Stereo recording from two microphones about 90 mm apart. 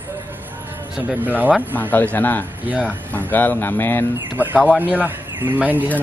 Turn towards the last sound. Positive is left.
turn(degrees=-20)  # may be behind; listen again after turning